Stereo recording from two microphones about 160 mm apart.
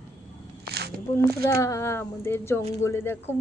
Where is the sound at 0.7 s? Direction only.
90° right.